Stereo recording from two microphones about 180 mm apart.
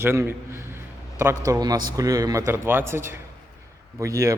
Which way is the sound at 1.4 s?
20° right (ahead or behind).